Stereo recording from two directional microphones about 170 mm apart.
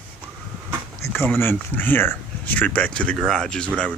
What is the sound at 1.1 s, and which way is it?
Speech, 10° left (ahead or behind).